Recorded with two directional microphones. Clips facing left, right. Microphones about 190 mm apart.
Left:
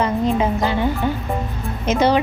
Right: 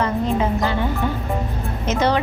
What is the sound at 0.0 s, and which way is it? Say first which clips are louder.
Speech: left 2 dB; 15° left (ahead or behind).